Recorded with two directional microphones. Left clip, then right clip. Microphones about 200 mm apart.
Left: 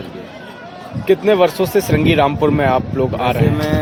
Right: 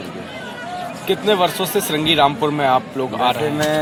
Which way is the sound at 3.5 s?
30° left (ahead or behind).